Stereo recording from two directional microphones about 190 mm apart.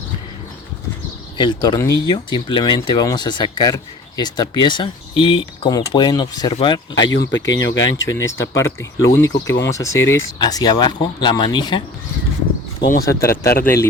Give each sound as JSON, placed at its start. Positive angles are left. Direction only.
{"t": 1.4, "sound": "speech", "side_deg": 25}
{"t": 6.9, "sound": "speech", "side_deg": 75}
{"t": 8.0, "sound": "speech", "side_deg": 15}
{"t": 13.1, "sound": "speech", "side_deg": 15}